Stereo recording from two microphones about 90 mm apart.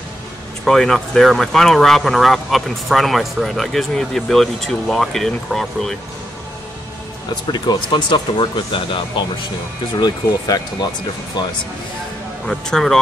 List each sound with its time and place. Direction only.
0.7 s speech: 5° left (ahead or behind)
7.5 s speech: 55° left (ahead or behind)
9.9 s speech: 45° left (ahead or behind)
12.4 s speech: 5° left (ahead or behind)